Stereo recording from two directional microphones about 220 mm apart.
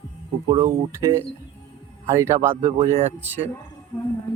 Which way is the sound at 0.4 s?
20° right (ahead or behind).